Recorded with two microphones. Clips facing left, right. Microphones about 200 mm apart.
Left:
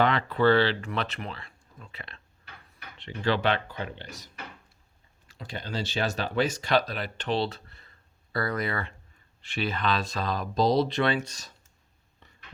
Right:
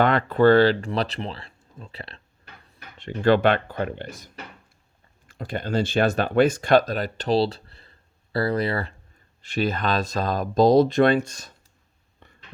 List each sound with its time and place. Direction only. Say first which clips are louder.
0.0 s speech: right 5 dB; 50° right (ahead or behind); by 2.5 s 35° right (ahead or behind)
3.0 s speech: right 8 dB; 50° right (ahead or behind)
5.3 s speech: right 9 dB; 55° right (ahead or behind)
12.2 s a sound: right 5 dB; 55° right (ahead or behind)